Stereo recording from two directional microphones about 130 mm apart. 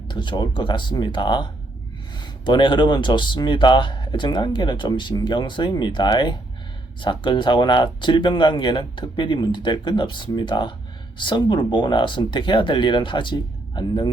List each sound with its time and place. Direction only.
0.1 s speech: 35° left (ahead or behind)